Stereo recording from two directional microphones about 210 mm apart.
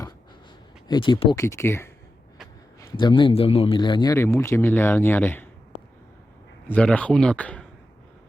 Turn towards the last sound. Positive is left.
turn(degrees=5)  # may be behind; listen again after turning